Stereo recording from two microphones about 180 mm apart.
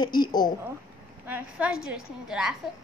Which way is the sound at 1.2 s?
10° right (ahead or behind).